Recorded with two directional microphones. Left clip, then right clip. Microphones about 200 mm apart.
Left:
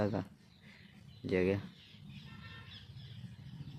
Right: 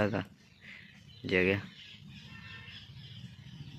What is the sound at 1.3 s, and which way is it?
Speech, centre (ahead or behind).